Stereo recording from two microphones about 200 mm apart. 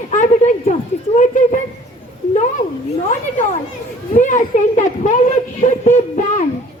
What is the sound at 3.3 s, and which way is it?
Speech, 40° left (ahead or behind).